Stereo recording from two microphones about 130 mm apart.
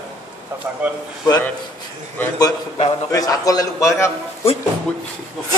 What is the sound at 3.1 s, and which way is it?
A man's voice, 25° left (ahead or behind).